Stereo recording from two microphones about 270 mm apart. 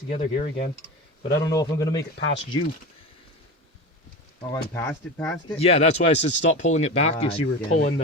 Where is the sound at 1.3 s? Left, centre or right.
Centre.